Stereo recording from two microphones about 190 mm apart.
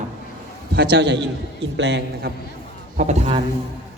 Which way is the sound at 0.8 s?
65° right (ahead or behind).